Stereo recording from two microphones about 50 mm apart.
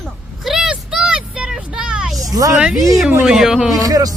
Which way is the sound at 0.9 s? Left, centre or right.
Centre.